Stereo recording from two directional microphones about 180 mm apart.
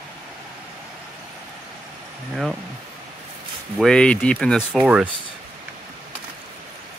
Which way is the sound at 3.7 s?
5° left (ahead or behind).